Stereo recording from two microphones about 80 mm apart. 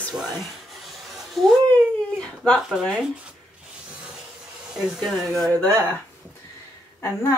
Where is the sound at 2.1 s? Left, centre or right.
Centre.